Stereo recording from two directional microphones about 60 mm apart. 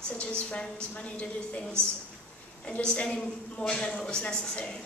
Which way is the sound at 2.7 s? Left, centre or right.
Centre.